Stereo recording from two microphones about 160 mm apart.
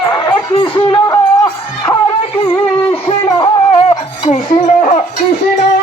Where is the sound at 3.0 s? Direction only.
35° left (ahead or behind).